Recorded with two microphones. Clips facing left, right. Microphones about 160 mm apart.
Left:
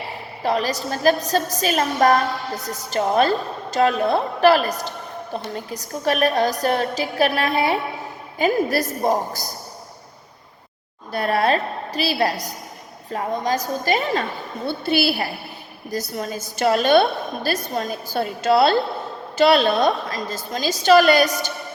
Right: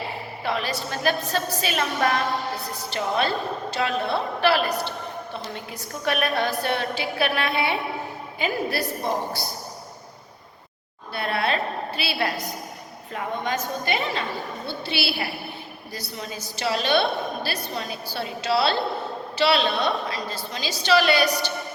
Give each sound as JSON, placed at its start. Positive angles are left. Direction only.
{"t": 0.4, "sound": "a woman's voice", "side_deg": 40}
{"t": 11.1, "sound": "a woman's voice", "side_deg": 40}